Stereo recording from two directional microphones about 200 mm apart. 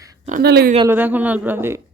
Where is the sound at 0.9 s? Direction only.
10° right (ahead or behind).